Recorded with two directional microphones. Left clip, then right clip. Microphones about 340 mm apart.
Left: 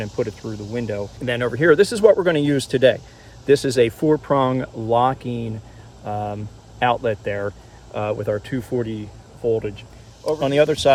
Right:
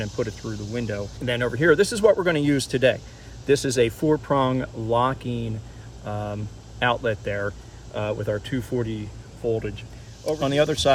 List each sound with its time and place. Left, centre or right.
0.0 s speech: centre